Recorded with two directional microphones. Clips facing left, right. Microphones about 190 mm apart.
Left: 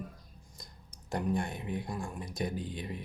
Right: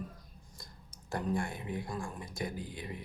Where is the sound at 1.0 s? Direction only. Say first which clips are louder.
Left 2 dB; 20° left (ahead or behind).